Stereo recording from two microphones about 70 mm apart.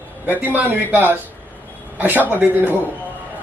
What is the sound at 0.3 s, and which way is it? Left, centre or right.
A man's voice, right.